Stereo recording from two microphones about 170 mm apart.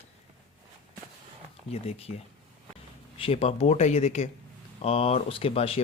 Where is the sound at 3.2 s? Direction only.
35° left (ahead or behind).